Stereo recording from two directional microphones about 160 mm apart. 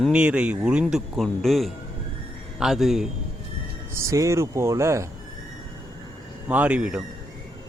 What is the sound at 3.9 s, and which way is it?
A man's voice, 20° right (ahead or behind).